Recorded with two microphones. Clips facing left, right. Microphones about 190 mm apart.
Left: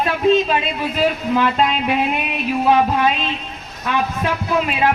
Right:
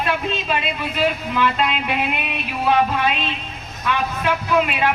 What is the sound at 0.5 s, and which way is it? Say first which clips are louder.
Speech: left 3 dB; 40° left (ahead or behind).